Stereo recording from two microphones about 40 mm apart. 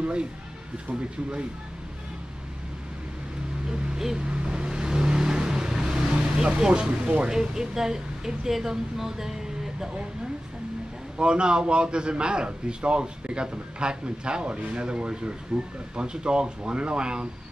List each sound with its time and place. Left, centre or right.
0.0 s speech: right
3.6 s a sound: right
4.2 s vehicle: right
6.4 s a man's voice: right
7.2 s speech: centre
11.1 s a man's voice: right